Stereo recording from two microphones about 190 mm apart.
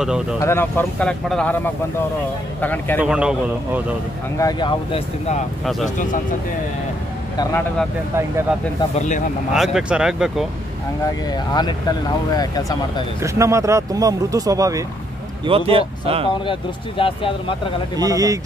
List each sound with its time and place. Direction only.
0.0 s speech: 5° right (ahead or behind)
0.4 s speech: 15° left (ahead or behind)
2.6 s speech: 10° left (ahead or behind)
3.0 s speech: 5° right (ahead or behind)
4.4 s speech: 20° left (ahead or behind)
8.9 s speech: 40° left (ahead or behind)
9.5 s speech: 5° right (ahead or behind)
11.3 s speech: 20° left (ahead or behind)
13.2 s speech: 15° right (ahead or behind)
15.4 s speech: 30° right (ahead or behind)
16.4 s speech: 25° left (ahead or behind)
17.9 s speech: 20° right (ahead or behind)